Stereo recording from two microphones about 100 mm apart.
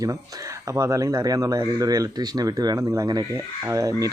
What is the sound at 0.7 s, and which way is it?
Speech, 35° right (ahead or behind).